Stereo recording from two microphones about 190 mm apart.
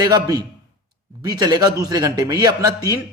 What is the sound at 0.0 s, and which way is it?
Speech, 20° right (ahead or behind).